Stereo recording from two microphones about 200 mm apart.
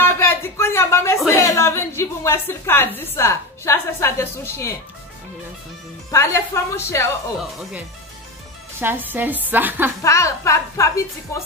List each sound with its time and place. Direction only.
0.0 s a sound: 10° left (ahead or behind)
1.3 s a woman's voice: 15° left (ahead or behind)
6.0 s a woman's voice: 15° left (ahead or behind)
8.7 s a woman's voice: 10° right (ahead or behind)
10.0 s a woman's voice: 15° left (ahead or behind)